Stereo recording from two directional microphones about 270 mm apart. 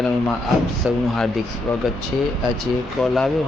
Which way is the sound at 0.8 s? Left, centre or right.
Centre.